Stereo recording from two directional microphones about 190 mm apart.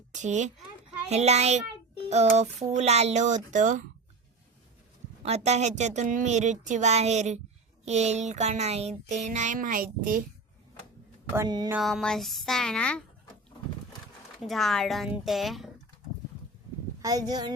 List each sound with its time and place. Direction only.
0.1 s a child's voice: 40° right (ahead or behind)
1.1 s a sound: 35° right (ahead or behind)
5.2 s a sound: 35° right (ahead or behind)
11.3 s speech: 20° right (ahead or behind)
11.7 s speech: centre (ahead or behind)
14.4 s speech: centre (ahead or behind)
17.0 s speech: 20° right (ahead or behind)